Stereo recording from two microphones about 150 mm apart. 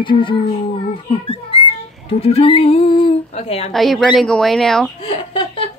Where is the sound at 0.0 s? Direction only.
35° left (ahead or behind).